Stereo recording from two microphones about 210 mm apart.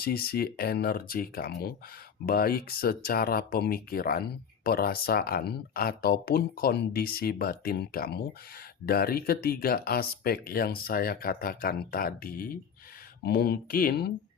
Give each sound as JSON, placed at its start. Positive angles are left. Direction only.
{"t": 0.0, "sound": "speech", "side_deg": 45}